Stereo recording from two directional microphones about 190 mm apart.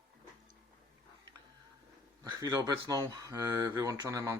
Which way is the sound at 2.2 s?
20° right (ahead or behind).